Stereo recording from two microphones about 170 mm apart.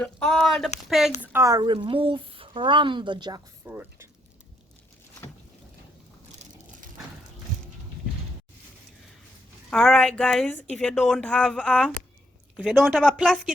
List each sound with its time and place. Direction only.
0.0 s a woman's voice: 5° left (ahead or behind)
1.2 s speech: 15° right (ahead or behind)
3.6 s speech: 15° right (ahead or behind)
9.6 s a woman's voice: 5° left (ahead or behind)